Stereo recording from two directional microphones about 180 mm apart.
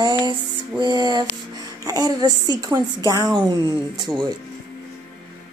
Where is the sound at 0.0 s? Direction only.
25° right (ahead or behind).